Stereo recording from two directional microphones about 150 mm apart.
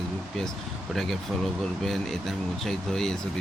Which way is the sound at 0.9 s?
Centre (ahead or behind).